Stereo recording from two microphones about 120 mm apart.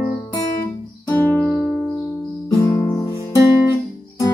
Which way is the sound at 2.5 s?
30° left (ahead or behind).